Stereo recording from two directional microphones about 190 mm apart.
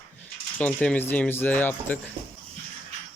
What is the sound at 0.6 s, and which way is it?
Speech, 5° left (ahead or behind).